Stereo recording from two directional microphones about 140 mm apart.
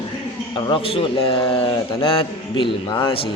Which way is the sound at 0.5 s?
40° left (ahead or behind).